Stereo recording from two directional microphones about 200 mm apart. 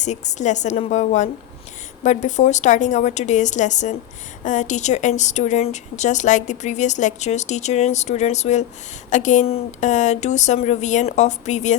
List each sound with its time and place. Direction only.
0.0 s a woman's voice: 35° left (ahead or behind)